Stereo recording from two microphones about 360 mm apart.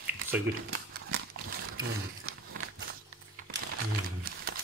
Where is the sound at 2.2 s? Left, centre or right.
Right.